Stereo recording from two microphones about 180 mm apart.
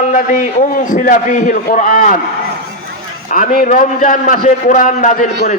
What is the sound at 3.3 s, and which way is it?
A man's voice, 50° left (ahead or behind).